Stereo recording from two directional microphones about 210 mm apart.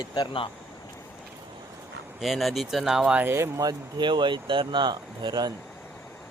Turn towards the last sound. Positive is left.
turn(degrees=-20)  # may be behind; listen again after turning